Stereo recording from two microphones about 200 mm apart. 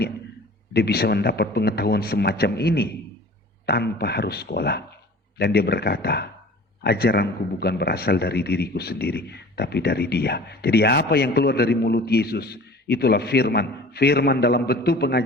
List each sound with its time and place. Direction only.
0.7 s a man's voice: 50° left (ahead or behind)